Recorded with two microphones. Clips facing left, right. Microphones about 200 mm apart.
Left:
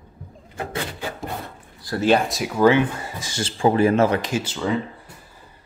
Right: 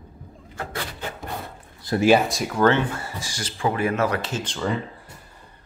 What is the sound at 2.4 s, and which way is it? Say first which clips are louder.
Speech: left 3 dB; 10° left (ahead or behind).